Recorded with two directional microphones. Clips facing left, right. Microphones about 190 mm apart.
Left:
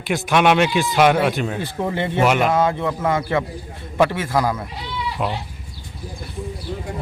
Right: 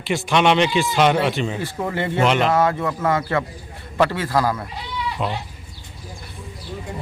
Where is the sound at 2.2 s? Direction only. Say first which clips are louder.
Left 1 dB; 10° left (ahead or behind).